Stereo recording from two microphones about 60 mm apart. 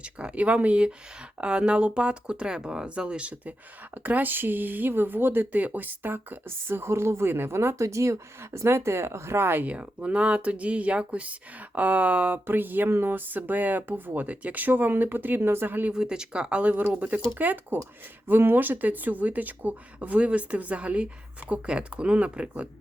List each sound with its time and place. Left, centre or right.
0.0 s speech: centre; by 9.6 s right
9.6 s speech: right
15.9 s speech: centre